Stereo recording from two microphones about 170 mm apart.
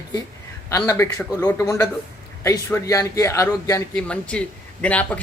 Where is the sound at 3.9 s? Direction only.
5° left (ahead or behind).